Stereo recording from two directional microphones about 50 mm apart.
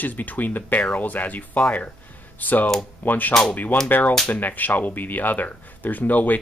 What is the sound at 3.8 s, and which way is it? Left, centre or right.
Speech, left.